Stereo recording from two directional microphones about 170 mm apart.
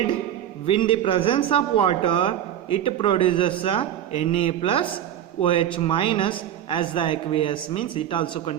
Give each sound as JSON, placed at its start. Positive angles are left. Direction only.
{"t": 0.6, "sound": "a woman's voice", "side_deg": 30}